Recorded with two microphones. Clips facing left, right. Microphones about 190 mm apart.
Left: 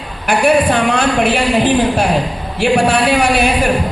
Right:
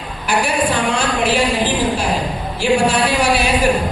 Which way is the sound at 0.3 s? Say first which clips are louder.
Left 6 dB; 55° left (ahead or behind).